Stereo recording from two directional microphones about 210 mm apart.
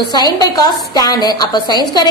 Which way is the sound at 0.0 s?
20° left (ahead or behind).